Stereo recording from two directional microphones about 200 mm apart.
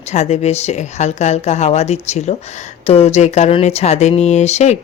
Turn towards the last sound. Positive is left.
turn(degrees=35)  # may be behind; listen again after turning